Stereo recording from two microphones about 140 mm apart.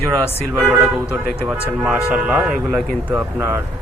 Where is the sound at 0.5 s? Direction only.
10° right (ahead or behind).